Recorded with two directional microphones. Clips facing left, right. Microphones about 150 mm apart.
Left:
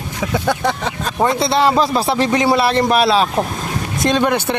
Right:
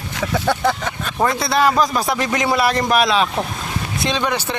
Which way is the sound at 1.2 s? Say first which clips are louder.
Left 2 dB; 25° left (ahead or behind).